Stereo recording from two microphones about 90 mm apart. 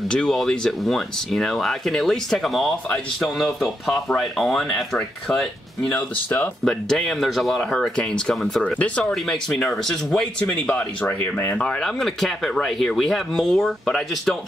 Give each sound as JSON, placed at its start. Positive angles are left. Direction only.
{"t": 0.1, "sound": "speech", "side_deg": 5}
{"t": 8.7, "sound": "speech", "side_deg": 15}
{"t": 9.1, "sound": "speech", "side_deg": 5}